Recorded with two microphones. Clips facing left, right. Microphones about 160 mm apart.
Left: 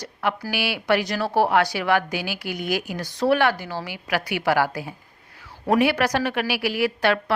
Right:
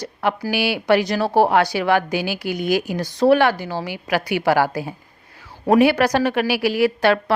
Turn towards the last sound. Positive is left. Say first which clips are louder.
# right 4 dB
turn(degrees=-35)  # may be behind; listen again after turning